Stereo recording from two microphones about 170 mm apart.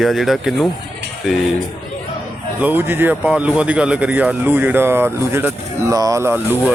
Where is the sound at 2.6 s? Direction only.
10° right (ahead or behind).